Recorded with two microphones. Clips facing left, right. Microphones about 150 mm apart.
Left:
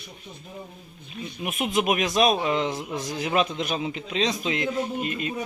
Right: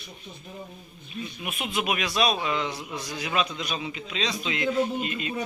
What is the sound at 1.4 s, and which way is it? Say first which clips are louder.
A man's voice: left 6 dB; 45° left (ahead or behind).